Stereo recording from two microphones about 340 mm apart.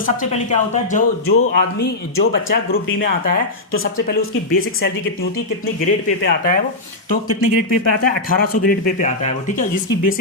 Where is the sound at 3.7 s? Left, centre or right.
Left.